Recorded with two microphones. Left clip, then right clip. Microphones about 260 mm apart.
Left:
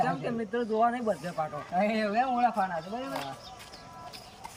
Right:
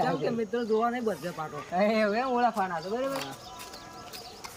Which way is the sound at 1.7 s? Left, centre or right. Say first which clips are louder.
Right 2 dB; centre.